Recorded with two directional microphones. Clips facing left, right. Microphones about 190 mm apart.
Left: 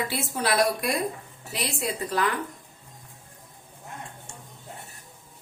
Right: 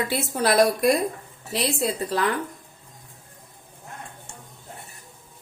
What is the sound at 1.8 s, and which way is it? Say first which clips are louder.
Speech: right 3 dB; 30° right (ahead or behind).